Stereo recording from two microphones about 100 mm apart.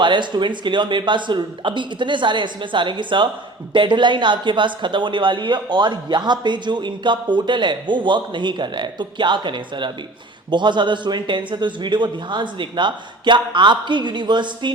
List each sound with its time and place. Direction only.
0.0 s speech: 50° right (ahead or behind)